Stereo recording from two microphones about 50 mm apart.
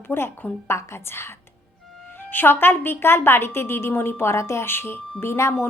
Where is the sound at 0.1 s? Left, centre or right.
Left.